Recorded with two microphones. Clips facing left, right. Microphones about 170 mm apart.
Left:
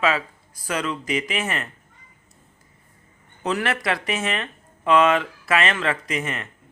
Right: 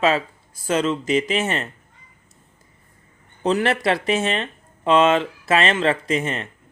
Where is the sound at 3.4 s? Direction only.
30° right (ahead or behind).